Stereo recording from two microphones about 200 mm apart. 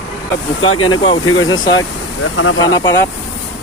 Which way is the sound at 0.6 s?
90° left.